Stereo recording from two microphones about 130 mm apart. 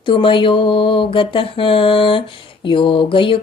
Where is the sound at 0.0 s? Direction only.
40° left (ahead or behind).